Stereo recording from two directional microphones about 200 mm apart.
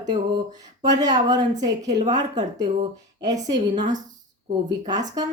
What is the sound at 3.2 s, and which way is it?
Speech, 20° right (ahead or behind).